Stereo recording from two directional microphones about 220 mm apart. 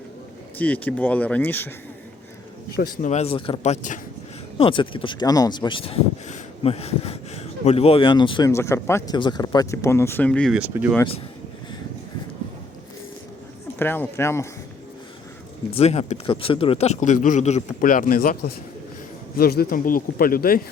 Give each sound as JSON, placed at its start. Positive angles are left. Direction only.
{"t": 0.6, "sound": "speech", "side_deg": 5}
{"t": 2.7, "sound": "a man's voice", "side_deg": 40}
{"t": 4.5, "sound": "speech", "side_deg": 25}
{"t": 10.6, "sound": "speech", "side_deg": -10}
{"t": 13.7, "sound": "speech", "side_deg": 10}
{"t": 15.7, "sound": "a man's voice", "side_deg": 30}